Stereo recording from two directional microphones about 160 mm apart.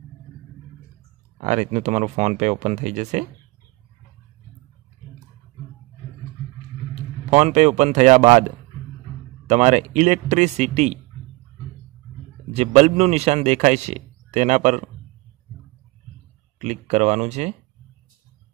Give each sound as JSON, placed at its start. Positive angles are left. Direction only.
{"t": 1.4, "sound": "speech", "side_deg": -50}
{"t": 7.2, "sound": "speech", "side_deg": -45}
{"t": 12.5, "sound": "speech", "side_deg": -40}
{"t": 16.5, "sound": "speech", "side_deg": -45}